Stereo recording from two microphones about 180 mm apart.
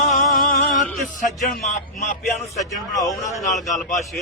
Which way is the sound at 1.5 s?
50° left (ahead or behind).